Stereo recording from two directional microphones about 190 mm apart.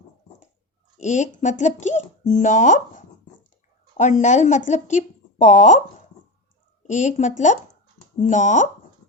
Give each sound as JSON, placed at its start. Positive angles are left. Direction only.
{"t": 0.9, "sound": "speech", "side_deg": 40}
{"t": 6.8, "sound": "speech", "side_deg": 40}